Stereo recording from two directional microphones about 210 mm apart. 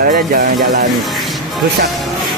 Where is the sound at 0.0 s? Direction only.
40° right (ahead or behind).